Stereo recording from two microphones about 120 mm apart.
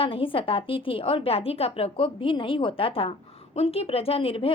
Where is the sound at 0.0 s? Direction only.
45° left (ahead or behind).